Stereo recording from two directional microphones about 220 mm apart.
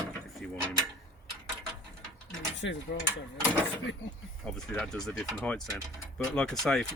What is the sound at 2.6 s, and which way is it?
Mechanisms, 55° left (ahead or behind).